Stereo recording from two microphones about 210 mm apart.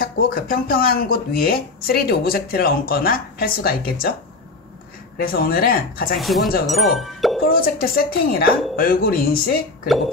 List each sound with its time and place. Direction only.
0.0 s speech: 45° left (ahead or behind)
5.1 s speech: 45° left (ahead or behind)
6.1 s speech: centre (ahead or behind)
7.4 s speech: 45° left (ahead or behind)